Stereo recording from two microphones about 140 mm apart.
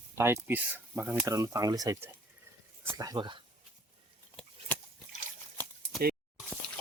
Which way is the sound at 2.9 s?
30° right (ahead or behind).